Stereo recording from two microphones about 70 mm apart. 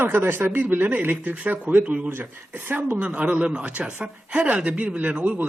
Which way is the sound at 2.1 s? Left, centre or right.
Right.